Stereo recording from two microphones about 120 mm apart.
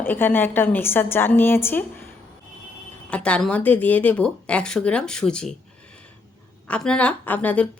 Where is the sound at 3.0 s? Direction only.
10° left (ahead or behind).